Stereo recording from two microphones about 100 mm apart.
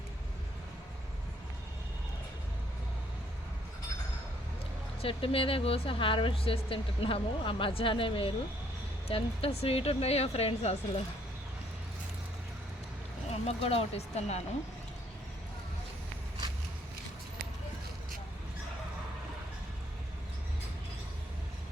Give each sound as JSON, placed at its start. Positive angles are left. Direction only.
{"t": 5.0, "sound": "speech", "side_deg": 65}
{"t": 9.0, "sound": "speech", "side_deg": 75}
{"t": 13.3, "sound": "speech", "side_deg": 85}